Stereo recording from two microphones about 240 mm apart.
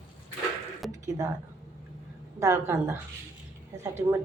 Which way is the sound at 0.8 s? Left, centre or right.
Centre.